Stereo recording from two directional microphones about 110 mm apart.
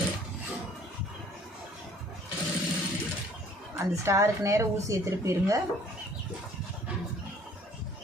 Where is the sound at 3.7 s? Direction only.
25° right (ahead or behind).